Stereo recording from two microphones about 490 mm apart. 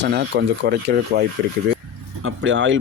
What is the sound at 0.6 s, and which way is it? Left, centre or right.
Speech, right.